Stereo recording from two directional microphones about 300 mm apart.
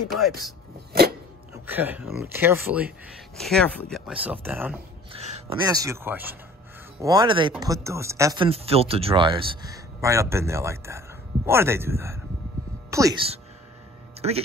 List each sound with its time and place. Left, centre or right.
0.1 s speech: centre
1.7 s speech: centre
5.1 s speech: centre